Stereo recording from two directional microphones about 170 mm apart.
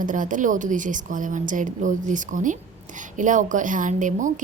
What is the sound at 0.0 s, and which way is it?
A woman's voice, 50° right (ahead or behind).